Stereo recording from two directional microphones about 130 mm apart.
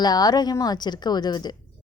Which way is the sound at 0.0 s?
30° left (ahead or behind).